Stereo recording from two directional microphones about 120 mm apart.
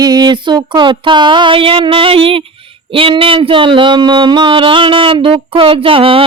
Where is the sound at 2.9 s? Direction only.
50° right (ahead or behind).